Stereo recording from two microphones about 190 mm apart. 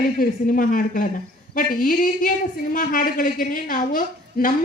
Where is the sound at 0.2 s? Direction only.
45° left (ahead or behind).